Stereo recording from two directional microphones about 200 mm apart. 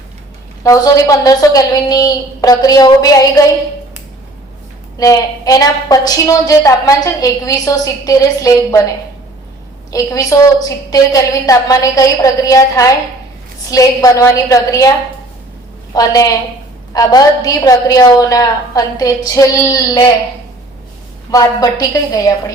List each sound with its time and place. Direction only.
0.6 s a woman's voice: 15° left (ahead or behind)
4.9 s a woman's voice: 15° left (ahead or behind)
9.9 s a woman's voice: 15° left (ahead or behind)
16.0 s a woman's voice: 15° left (ahead or behind)
21.2 s a woman's voice: 15° left (ahead or behind)